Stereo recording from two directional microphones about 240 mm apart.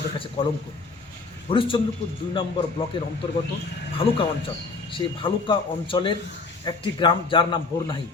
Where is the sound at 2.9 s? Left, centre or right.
Left.